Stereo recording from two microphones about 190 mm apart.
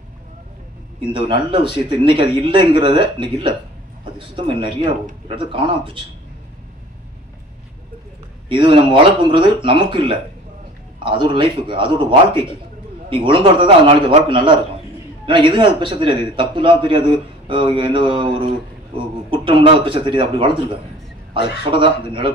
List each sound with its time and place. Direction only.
2.1 s a man's voice: 25° right (ahead or behind)
8.5 s a man's voice: 25° right (ahead or behind)
21.6 s a man's voice: 25° right (ahead or behind)